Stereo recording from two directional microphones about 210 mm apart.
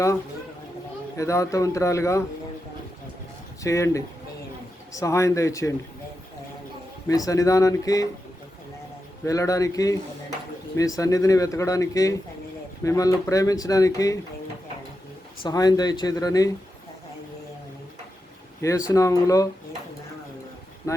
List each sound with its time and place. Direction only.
1.1 s speech: 15° left (ahead or behind)
3.6 s speech: 15° left (ahead or behind)
7.1 s speech: 15° left (ahead or behind)
9.2 s speech: 15° left (ahead or behind)
15.4 s speech: 20° left (ahead or behind)
18.9 s speech: 15° left (ahead or behind)
20.9 s vehicle: 15° left (ahead or behind)